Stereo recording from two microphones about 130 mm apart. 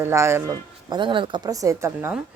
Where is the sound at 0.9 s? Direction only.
40° right (ahead or behind).